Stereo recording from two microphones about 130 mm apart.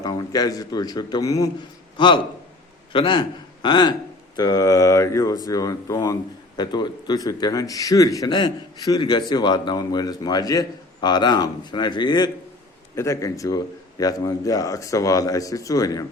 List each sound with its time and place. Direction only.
0.0 s a man's voice: 30° left (ahead or behind)
2.0 s a man's voice: 35° left (ahead or behind)
13.0 s a man's voice: 25° left (ahead or behind)